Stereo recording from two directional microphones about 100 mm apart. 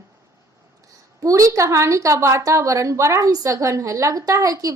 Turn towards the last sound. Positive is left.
turn(degrees=-35)  # may be behind; listen again after turning